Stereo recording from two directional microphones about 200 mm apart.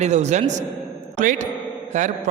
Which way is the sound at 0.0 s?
35° right (ahead or behind).